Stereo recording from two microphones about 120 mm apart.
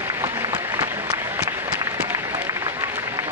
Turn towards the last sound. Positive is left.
turn(degrees=-20)  # may be behind; listen again after turning